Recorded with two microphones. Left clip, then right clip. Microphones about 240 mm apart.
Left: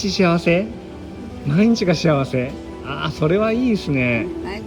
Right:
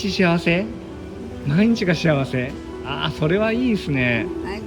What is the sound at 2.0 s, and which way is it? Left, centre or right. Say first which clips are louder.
Speech: left 2 dB; centre.